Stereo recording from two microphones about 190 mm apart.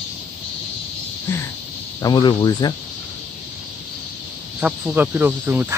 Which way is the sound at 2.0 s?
25° left (ahead or behind).